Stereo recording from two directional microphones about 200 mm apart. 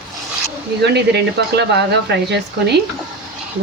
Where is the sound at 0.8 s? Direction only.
60° right (ahead or behind).